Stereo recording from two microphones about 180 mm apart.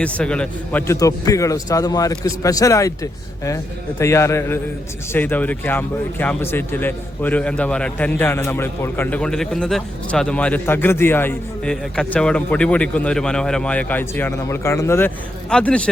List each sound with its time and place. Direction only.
0.0 s speech: 5° left (ahead or behind)